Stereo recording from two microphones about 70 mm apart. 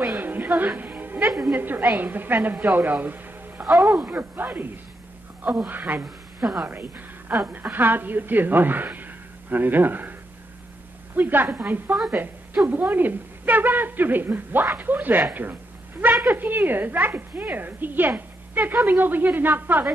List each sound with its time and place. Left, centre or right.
0.2 s a sound: right
0.7 s music: right
1.4 s a woman's voice: right
3.6 s speech: centre
4.0 s a woman's voice: right
6.0 s a woman's voice: centre
6.6 s a woman's voice: right
11.1 s a woman's voice: right
16.3 s a woman's voice: right